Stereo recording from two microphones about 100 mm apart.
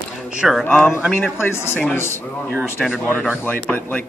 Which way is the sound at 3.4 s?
15° left (ahead or behind).